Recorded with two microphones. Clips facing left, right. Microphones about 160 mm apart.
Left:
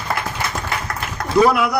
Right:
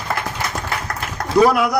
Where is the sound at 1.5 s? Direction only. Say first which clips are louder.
Even; 35° right (ahead or behind).